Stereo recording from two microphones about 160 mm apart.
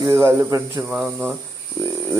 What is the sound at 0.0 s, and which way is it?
Speech, 15° right (ahead or behind).